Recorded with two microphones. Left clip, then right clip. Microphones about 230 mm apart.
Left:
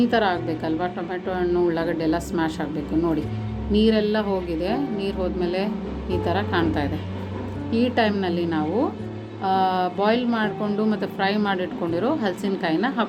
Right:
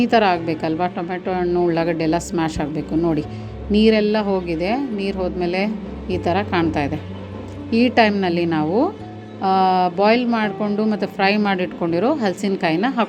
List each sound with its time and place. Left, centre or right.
0.0 s a woman's voice: right